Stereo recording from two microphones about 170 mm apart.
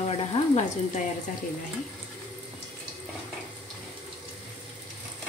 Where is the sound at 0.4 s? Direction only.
30° left (ahead or behind).